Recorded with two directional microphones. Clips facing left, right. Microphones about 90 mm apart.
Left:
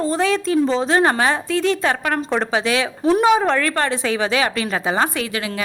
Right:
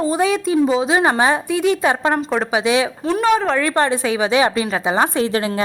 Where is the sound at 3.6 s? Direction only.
20° right (ahead or behind).